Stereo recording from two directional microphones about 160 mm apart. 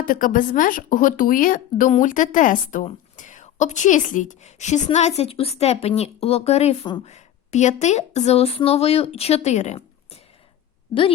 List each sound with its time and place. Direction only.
0.0 s a woman's voice: 60° left (ahead or behind)